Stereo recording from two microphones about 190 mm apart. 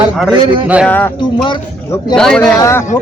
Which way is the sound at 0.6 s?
5° right (ahead or behind).